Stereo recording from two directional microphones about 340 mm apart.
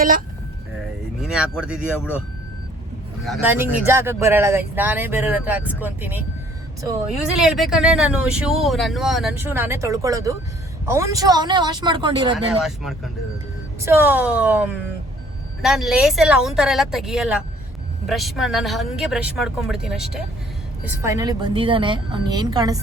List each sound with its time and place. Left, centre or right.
1.2 s speech: centre
3.2 s speech: centre
12.6 s speech: centre